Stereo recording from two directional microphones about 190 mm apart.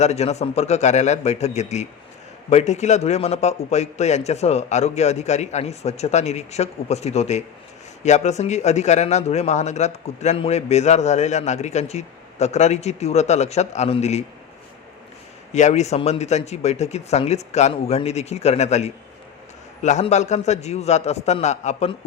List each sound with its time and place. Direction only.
0.0 s a man's voice: 35° left (ahead or behind)
15.5 s a man's voice: 35° left (ahead or behind)